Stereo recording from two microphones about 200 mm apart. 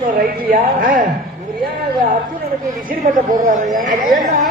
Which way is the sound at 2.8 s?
40° right (ahead or behind).